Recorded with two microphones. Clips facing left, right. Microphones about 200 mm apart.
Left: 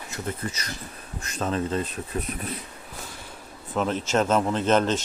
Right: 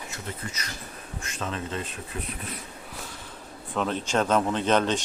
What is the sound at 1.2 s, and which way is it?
Speech, 40° left (ahead or behind).